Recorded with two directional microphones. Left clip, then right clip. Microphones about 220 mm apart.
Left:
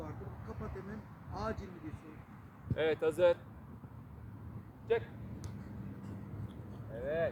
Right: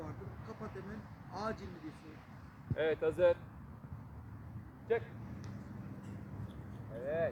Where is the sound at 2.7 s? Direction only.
30° left (ahead or behind).